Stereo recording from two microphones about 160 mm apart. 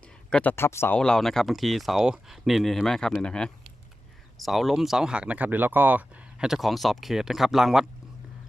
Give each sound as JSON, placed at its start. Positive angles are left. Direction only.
{"t": 0.3, "sound": "speech", "side_deg": 10}